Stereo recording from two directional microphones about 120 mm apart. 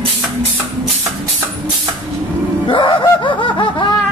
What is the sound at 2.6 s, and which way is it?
Fowl, 40° left (ahead or behind).